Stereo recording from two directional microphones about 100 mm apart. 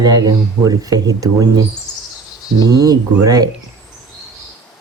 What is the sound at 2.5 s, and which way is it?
Speech, 40° right (ahead or behind).